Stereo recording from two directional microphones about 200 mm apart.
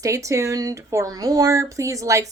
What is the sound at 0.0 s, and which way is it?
Speech, 15° right (ahead or behind).